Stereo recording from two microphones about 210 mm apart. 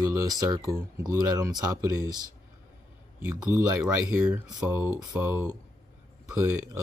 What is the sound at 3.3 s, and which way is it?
Speech, 5° right (ahead or behind).